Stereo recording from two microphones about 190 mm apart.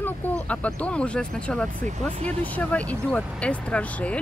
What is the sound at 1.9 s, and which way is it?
Speech, 35° right (ahead or behind).